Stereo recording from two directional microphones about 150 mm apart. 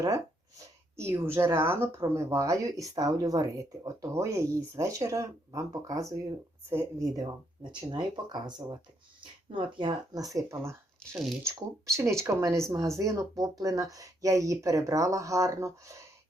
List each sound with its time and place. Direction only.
0.0 s speech: 20° right (ahead or behind)